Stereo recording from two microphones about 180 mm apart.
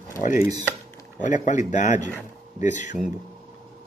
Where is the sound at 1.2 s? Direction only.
45° left (ahead or behind).